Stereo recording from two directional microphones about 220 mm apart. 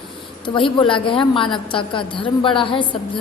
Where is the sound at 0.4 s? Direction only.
20° left (ahead or behind).